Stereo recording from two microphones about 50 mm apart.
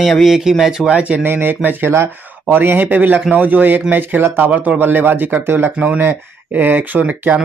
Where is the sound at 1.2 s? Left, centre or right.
Right.